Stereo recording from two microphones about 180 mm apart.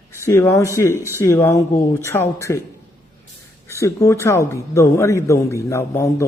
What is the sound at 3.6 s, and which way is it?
A man's voice, 15° left (ahead or behind).